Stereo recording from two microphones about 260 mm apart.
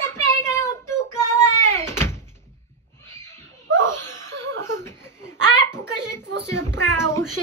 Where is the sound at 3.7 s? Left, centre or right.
Centre.